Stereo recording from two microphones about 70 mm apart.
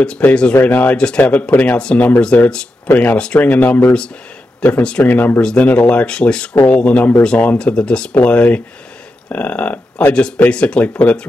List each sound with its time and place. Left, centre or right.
0.3 s speech: centre
5.0 s speech: left
5.4 s speech: centre
8.1 s speech: left